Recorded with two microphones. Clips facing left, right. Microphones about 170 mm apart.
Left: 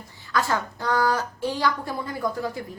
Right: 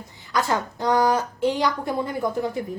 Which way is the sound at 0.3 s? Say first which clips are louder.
Right 1 dB; 20° right (ahead or behind).